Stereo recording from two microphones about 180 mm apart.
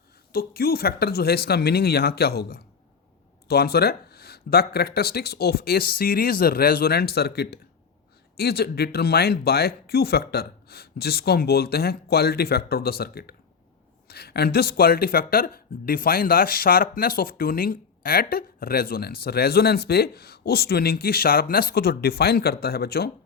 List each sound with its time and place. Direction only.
0.3 s speech: 60° left (ahead or behind)